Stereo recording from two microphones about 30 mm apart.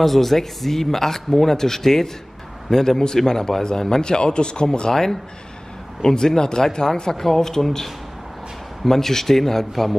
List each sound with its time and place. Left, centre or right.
0.0 s a man's voice: centre
4.0 s speech: left
4.9 s speech: centre